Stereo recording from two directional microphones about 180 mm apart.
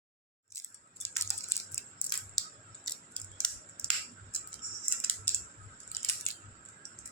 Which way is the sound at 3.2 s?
5° left (ahead or behind).